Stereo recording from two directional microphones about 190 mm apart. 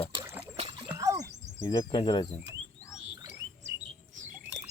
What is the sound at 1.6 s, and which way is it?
Speech, 20° left (ahead or behind).